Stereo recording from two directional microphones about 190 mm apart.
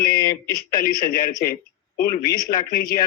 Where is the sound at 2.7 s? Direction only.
50° left (ahead or behind).